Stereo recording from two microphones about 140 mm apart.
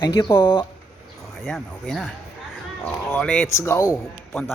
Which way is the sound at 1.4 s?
Centre (ahead or behind).